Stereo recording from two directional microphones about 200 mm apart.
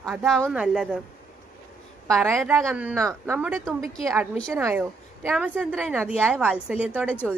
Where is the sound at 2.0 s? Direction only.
5° left (ahead or behind).